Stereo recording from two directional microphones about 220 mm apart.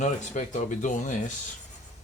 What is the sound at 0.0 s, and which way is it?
Speech, 35° left (ahead or behind).